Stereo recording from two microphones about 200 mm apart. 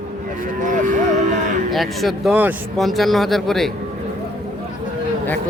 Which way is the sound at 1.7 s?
Centre (ahead or behind).